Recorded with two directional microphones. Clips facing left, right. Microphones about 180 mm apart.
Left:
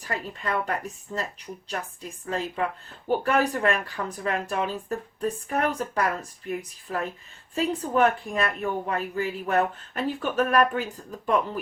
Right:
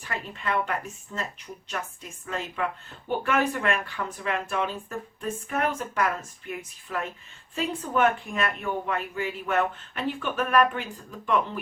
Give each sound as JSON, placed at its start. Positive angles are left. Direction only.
{"t": 0.0, "sound": "speech", "side_deg": 40}